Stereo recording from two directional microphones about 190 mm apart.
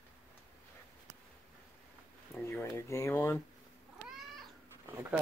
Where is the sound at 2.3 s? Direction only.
15° left (ahead or behind).